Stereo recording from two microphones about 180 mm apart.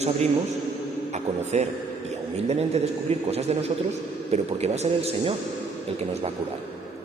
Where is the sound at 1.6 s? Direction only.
35° right (ahead or behind).